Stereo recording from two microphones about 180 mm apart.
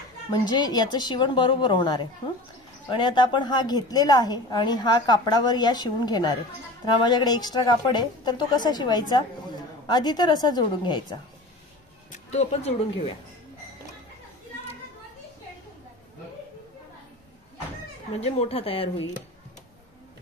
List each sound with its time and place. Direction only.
0.3 s a woman's voice: 25° left (ahead or behind)
12.1 s speech: 40° left (ahead or behind)
18.2 s speech: 35° left (ahead or behind)